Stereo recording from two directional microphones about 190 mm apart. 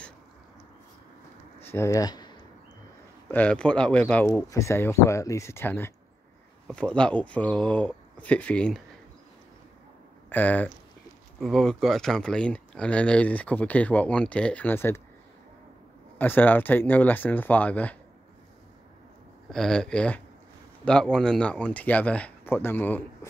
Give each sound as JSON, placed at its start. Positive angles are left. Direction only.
{"t": 1.6, "sound": "speech", "side_deg": 10}
{"t": 3.3, "sound": "speech", "side_deg": 5}
{"t": 10.3, "sound": "speech", "side_deg": 10}
{"t": 16.2, "sound": "speech", "side_deg": 10}
{"t": 19.5, "sound": "speech", "side_deg": 5}